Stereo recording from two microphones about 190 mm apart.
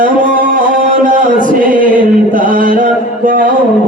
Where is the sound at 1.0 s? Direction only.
45° right (ahead or behind).